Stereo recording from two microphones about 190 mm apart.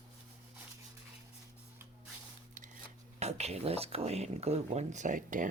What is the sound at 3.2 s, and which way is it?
Speech, 35° right (ahead or behind).